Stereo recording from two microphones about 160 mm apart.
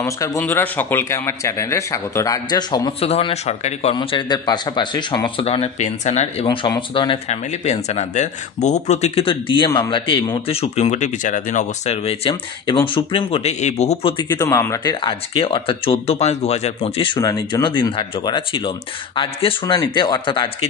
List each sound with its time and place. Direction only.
0.0 s speech: 20° left (ahead or behind)
3.0 s speech: 35° left (ahead or behind)
3.9 s speech: 30° left (ahead or behind)
6.4 s speech: 30° left (ahead or behind)
7.2 s speech: 45° left (ahead or behind)
14.1 s speech: 25° left (ahead or behind)